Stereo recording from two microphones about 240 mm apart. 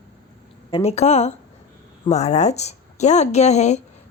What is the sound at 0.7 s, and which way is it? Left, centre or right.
A woman's voice, left.